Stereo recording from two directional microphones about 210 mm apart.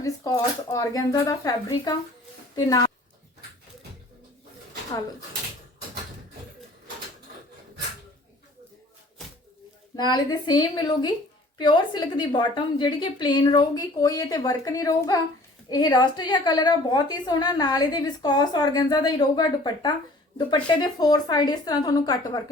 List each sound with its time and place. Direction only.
0.0 s speech: 15° left (ahead or behind)
9.9 s a woman's voice: 20° left (ahead or behind)